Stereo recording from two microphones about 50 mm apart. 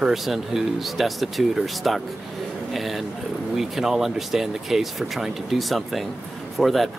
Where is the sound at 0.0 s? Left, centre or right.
Centre.